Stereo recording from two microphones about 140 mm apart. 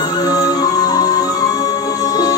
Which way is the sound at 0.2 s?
25° left (ahead or behind).